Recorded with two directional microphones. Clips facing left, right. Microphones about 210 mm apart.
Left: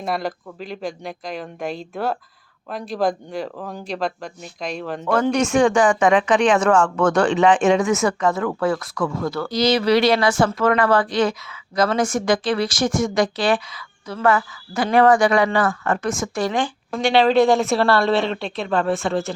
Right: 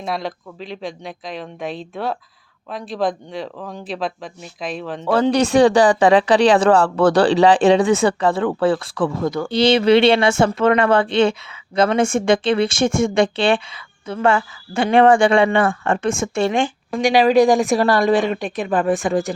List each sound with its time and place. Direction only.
0.0 s speech: centre (ahead or behind)
5.1 s a woman's voice: 35° right (ahead or behind); by 19.3 s 15° right (ahead or behind)